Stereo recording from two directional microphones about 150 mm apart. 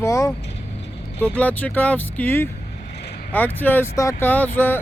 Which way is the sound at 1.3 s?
10° left (ahead or behind).